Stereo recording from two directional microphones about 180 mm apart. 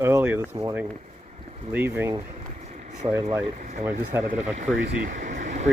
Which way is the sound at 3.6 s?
40° right (ahead or behind).